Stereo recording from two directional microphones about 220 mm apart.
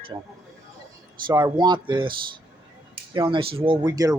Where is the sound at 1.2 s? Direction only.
20° right (ahead or behind).